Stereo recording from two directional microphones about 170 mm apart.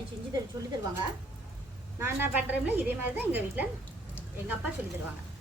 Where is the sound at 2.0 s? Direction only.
10° right (ahead or behind).